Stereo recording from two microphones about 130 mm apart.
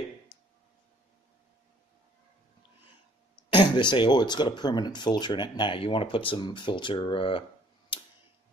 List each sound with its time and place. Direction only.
3.4 s speech: 40° left (ahead or behind)